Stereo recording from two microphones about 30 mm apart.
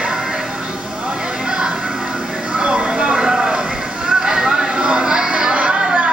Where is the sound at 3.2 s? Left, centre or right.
Centre.